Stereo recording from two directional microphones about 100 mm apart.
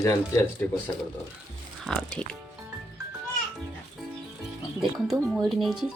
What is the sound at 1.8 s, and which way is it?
Speech, 5° left (ahead or behind).